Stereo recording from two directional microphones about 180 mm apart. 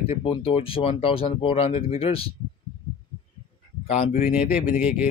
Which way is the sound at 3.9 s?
40° left (ahead or behind).